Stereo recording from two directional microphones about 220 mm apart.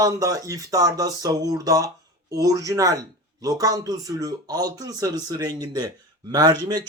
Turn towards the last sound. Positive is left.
turn(degrees=-20)  # may be behind; listen again after turning